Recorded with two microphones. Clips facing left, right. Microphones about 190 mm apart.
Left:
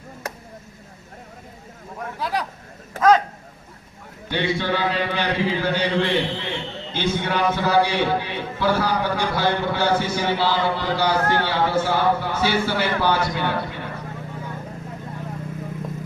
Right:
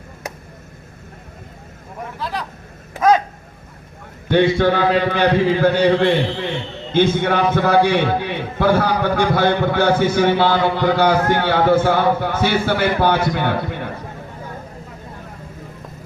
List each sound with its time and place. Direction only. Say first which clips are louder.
2.1 s speech: left 1 dB; 10° left (ahead or behind)
4.3 s a man's voice: right 8 dB; 50° right (ahead or behind)